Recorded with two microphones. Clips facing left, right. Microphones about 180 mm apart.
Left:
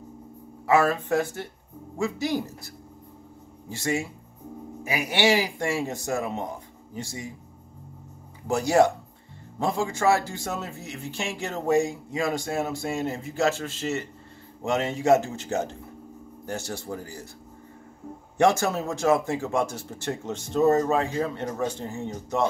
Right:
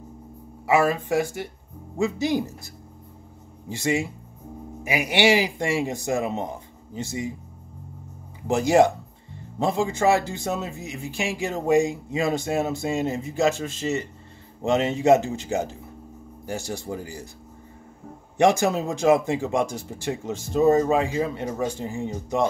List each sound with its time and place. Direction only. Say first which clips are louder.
0.7 s a man's voice: right 1 dB; 10° right (ahead or behind)
8.5 s a man's voice: right 2 dB; 20° right (ahead or behind)
18.4 s a man's voice: right 2 dB; 15° right (ahead or behind)